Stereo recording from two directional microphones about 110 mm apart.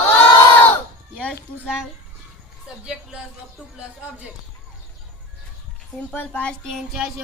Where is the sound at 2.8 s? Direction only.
5° right (ahead or behind).